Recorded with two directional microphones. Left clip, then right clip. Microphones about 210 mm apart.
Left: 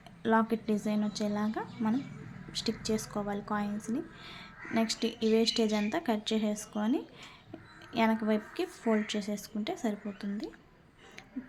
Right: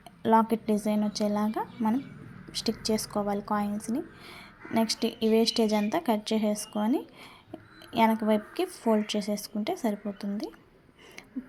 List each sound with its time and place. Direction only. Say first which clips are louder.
0.2 s a woman's voice: right 5 dB; 15° right (ahead or behind)